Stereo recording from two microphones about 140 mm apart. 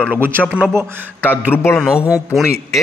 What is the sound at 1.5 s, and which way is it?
Speech, 15° left (ahead or behind).